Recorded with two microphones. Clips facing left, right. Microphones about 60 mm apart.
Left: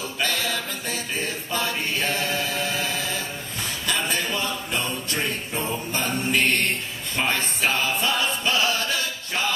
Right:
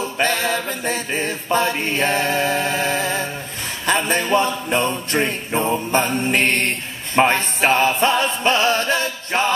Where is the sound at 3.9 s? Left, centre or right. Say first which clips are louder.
Right 9 dB; right.